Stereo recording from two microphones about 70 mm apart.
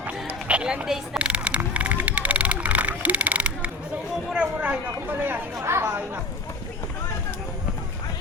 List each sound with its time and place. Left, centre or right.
0.0 s a sound: right
5.0 s speech: right
5.5 s chatter: right